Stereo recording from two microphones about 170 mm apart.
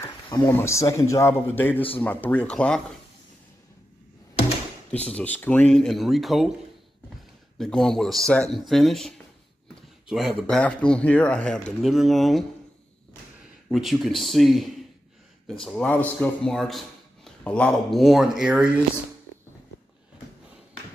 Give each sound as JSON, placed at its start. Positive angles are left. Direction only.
{"t": 0.5, "sound": "speech", "side_deg": 15}
{"t": 5.0, "sound": "speech", "side_deg": 10}
{"t": 7.5, "sound": "speech", "side_deg": 0}
{"t": 13.7, "sound": "speech", "side_deg": 0}